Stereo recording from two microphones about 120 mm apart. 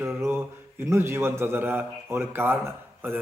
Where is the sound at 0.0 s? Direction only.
20° right (ahead or behind).